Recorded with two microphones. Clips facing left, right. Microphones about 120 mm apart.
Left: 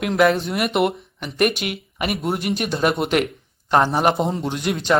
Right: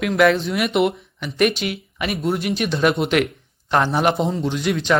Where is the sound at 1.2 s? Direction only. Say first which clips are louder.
Right 1 dB; 50° left (ahead or behind).